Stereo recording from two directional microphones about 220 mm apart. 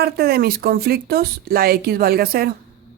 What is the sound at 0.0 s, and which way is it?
Speech, 45° right (ahead or behind).